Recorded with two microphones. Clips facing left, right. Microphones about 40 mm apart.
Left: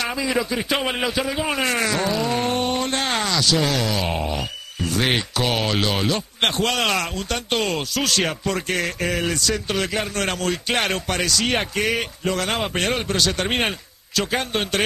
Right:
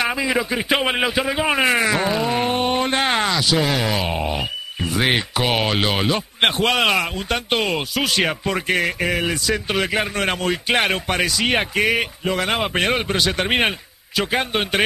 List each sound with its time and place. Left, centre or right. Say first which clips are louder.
0.0 s speech: right 3 dB; right